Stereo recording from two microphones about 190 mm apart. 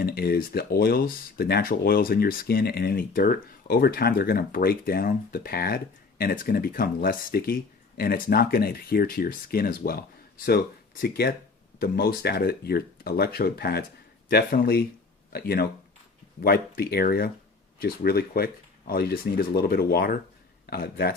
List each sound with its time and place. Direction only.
0.0 s speech: 55° left (ahead or behind)